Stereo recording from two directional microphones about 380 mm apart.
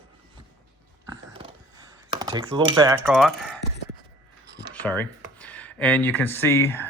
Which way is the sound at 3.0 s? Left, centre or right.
Centre.